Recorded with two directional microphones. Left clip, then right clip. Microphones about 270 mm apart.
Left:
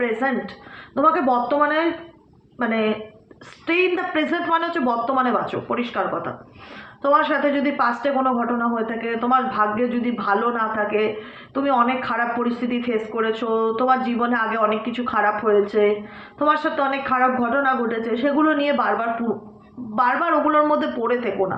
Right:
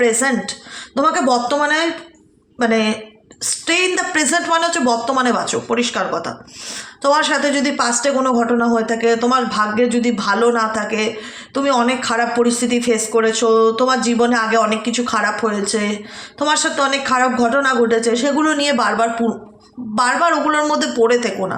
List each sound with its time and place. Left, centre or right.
0.0 s a man's voice: right